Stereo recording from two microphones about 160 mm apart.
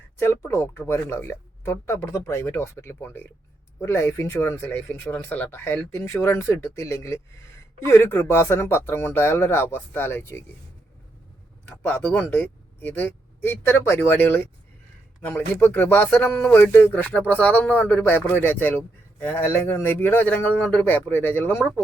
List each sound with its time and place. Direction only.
0.2 s speech: 15° left (ahead or behind)
11.6 s speech: 15° left (ahead or behind)